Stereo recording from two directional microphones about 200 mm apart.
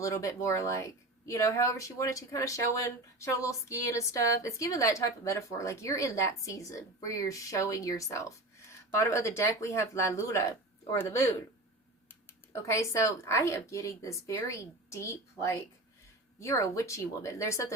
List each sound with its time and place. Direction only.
0.0 s speech: 15° left (ahead or behind)
12.6 s speech: 15° left (ahead or behind)